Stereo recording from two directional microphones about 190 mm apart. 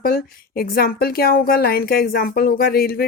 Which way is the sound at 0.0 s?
50° left (ahead or behind).